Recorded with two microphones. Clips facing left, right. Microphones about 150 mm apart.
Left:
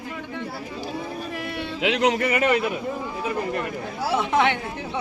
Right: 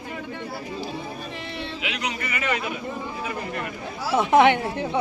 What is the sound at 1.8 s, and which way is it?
Speech, 90° left.